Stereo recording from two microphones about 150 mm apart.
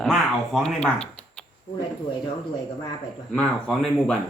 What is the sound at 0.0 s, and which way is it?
Speech, centre (ahead or behind).